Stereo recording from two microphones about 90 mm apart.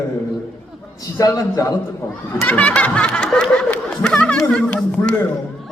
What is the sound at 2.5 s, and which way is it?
Snicker, 15° left (ahead or behind).